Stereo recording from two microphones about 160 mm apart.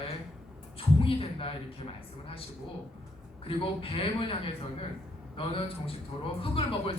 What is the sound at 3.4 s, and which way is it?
Speech, 35° left (ahead or behind).